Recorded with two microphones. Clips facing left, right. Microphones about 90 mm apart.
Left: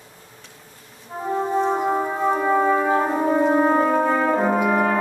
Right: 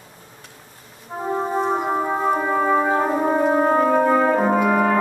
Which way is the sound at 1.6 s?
10° right (ahead or behind).